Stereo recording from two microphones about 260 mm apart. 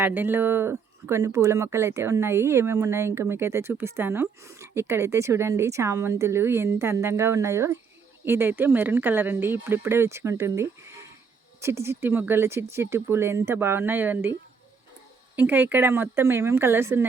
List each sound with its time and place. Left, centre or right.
0.0 s speech: centre
15.4 s speech: centre